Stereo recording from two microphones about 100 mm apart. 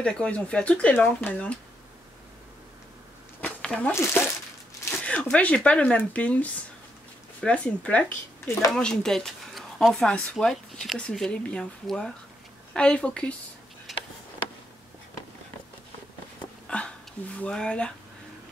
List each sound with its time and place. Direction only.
0.0 s speech: 10° left (ahead or behind)
3.3 s a sound: 15° left (ahead or behind)
3.9 s speech: 25° left (ahead or behind)
4.9 s speech: 10° left (ahead or behind)
9.9 s speech: 10° left (ahead or behind)
13.9 s tick: centre (ahead or behind)
16.6 s hiccup: 10° left (ahead or behind)
17.4 s speech: 10° left (ahead or behind)